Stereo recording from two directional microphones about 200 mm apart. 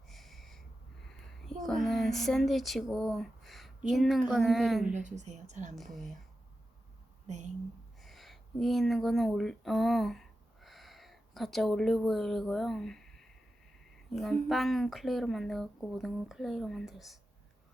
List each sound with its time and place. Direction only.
0.1 s a sound: centre (ahead or behind)
1.6 s speech: centre (ahead or behind)
4.9 s speech: 35° right (ahead or behind)
5.7 s speech: centre (ahead or behind)
7.3 s a woman's voice: 35° right (ahead or behind)
8.0 s speech: centre (ahead or behind)